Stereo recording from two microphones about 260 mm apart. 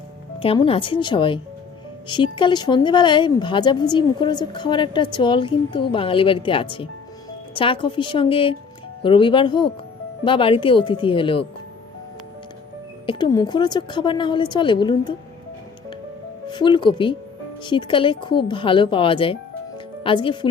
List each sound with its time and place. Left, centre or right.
0.3 s a woman's voice: centre
13.1 s a woman's voice: centre
16.5 s a woman's voice: centre